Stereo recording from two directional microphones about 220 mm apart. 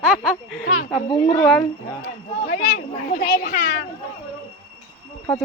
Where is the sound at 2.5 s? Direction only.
50° left (ahead or behind).